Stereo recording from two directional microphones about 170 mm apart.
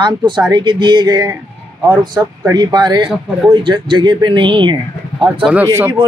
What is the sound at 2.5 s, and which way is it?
Speech, 25° right (ahead or behind).